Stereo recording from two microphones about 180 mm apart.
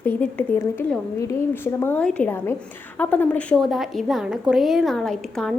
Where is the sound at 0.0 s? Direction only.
10° left (ahead or behind).